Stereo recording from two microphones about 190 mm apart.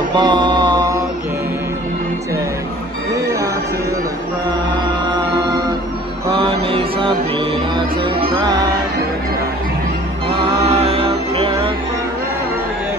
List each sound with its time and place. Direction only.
0.2 s mantra: 25° right (ahead or behind)
6.3 s mantra: 30° right (ahead or behind)
8.0 s music: 30° right (ahead or behind)
10.2 s music: 30° right (ahead or behind)